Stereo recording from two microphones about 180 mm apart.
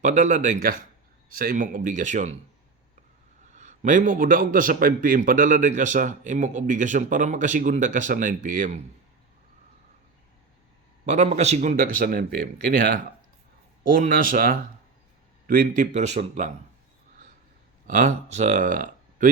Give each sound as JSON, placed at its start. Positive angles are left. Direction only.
{"t": 0.0, "sound": "a man's voice", "side_deg": -45}
{"t": 3.5, "sound": "a man's voice", "side_deg": -40}
{"t": 11.0, "sound": "a man's voice", "side_deg": -40}
{"t": 17.8, "sound": "speech", "side_deg": -45}